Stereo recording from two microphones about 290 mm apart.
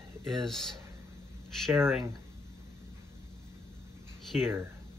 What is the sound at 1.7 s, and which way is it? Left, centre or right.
Speech, centre.